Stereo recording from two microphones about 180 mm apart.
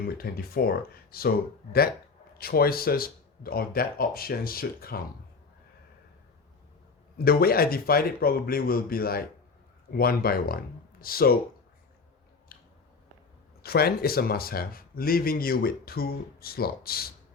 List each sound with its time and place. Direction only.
0.2 s speech: 60° left (ahead or behind)
2.4 s speech: 55° left (ahead or behind)
7.2 s speech: 55° left (ahead or behind)
12.5 s biting: 55° left (ahead or behind)
13.6 s speech: 60° left (ahead or behind)